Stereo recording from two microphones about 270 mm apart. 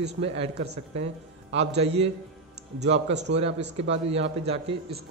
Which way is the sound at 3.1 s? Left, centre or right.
Right.